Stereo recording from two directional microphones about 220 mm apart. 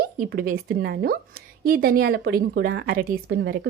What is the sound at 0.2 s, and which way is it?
A woman's voice, 40° right (ahead or behind).